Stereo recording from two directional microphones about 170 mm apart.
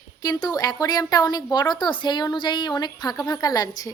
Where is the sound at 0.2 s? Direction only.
20° left (ahead or behind).